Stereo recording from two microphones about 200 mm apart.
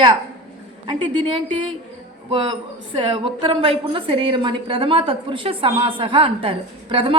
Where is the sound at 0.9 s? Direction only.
25° right (ahead or behind).